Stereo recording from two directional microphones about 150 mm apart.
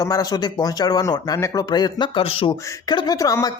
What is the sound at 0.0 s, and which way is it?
Speech, 25° left (ahead or behind).